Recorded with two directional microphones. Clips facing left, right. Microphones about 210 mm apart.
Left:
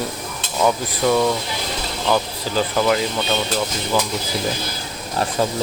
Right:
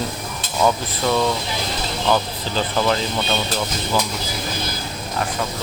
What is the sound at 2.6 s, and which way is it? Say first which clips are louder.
Dishes: left 2 dB; 10° left (ahead or behind).